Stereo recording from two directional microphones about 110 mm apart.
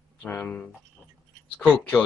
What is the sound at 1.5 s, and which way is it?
Speech, 15° left (ahead or behind).